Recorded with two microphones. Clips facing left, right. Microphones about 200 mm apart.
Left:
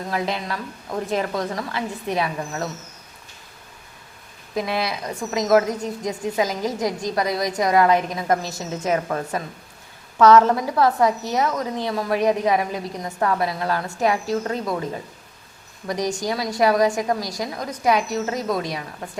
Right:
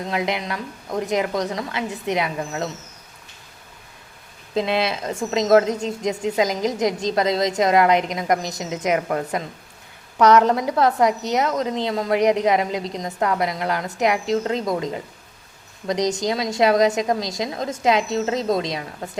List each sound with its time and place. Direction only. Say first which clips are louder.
0.0 s a woman's voice: right 1 dB; 20° right (ahead or behind)
4.5 s a woman's voice: right 3 dB; 25° right (ahead or behind)